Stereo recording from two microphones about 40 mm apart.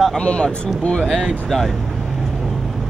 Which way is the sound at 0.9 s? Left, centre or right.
Centre.